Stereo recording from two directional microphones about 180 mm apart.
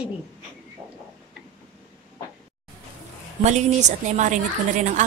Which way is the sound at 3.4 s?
40° right (ahead or behind).